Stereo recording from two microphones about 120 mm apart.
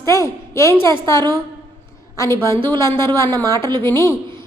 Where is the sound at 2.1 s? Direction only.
25° left (ahead or behind).